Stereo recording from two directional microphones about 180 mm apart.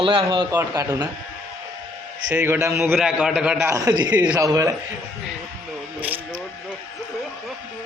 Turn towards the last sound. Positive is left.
turn(degrees=-10)  # may be behind; listen again after turning